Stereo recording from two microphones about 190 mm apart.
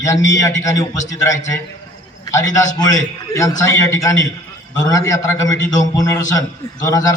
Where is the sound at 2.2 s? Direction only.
20° left (ahead or behind).